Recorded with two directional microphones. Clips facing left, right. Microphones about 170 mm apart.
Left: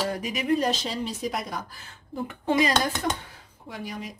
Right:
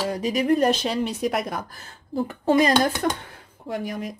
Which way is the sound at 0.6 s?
60° right (ahead or behind).